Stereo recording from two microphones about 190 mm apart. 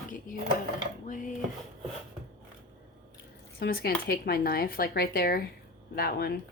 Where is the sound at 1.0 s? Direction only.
45° left (ahead or behind).